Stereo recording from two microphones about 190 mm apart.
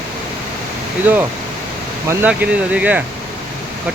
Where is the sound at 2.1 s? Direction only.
10° right (ahead or behind).